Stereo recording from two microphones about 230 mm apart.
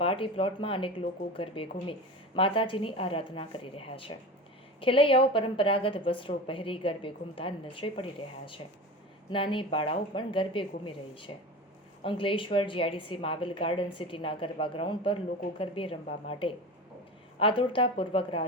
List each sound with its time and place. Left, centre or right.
0.0 s a woman's voice: left
9.3 s a woman's voice: left